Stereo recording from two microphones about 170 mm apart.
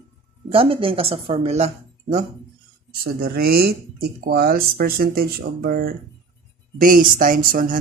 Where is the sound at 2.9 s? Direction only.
65° right (ahead or behind).